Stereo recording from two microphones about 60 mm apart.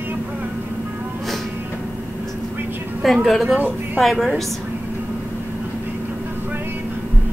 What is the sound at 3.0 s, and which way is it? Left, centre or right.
Speech, centre.